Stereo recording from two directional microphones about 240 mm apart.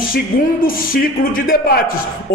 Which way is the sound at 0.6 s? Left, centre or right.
Left.